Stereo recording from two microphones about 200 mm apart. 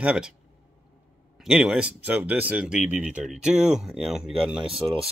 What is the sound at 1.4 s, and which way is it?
Speech, centre (ahead or behind).